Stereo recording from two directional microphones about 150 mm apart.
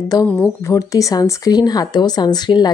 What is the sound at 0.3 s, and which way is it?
Speech, 15° left (ahead or behind).